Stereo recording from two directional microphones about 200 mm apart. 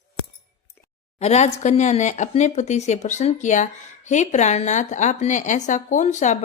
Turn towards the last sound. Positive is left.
turn(degrees=35)  # may be behind; listen again after turning